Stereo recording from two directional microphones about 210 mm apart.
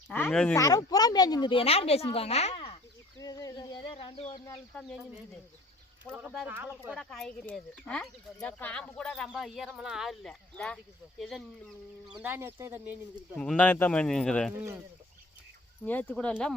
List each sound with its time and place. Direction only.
0.1 s speech: 5° left (ahead or behind); by 2.7 s 25° left (ahead or behind)
3.2 s speech: 15° left (ahead or behind)
4.7 s speech: centre (ahead or behind)
12.2 s speech: 10° right (ahead or behind)
13.4 s speech: 5° left (ahead or behind)
14.5 s speech: 10° right (ahead or behind)
15.8 s speech: 10° left (ahead or behind)